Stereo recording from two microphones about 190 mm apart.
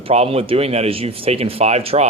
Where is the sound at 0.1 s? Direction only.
30° right (ahead or behind).